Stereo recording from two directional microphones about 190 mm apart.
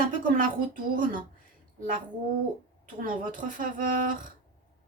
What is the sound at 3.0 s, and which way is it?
A woman's voice, 45° right (ahead or behind).